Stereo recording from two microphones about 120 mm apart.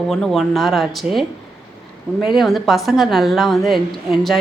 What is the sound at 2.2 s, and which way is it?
A woman's voice, centre (ahead or behind).